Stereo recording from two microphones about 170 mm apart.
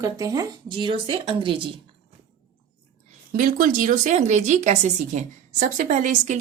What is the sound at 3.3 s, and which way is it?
Speech, 50° right (ahead or behind).